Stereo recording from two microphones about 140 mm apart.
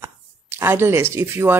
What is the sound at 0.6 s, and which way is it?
Speech, 15° right (ahead or behind).